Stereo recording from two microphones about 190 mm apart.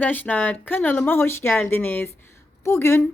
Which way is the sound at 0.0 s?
10° left (ahead or behind).